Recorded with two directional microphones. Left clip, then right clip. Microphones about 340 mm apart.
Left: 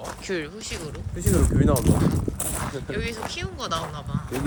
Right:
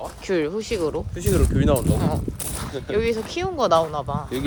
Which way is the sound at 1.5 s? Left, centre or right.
Right.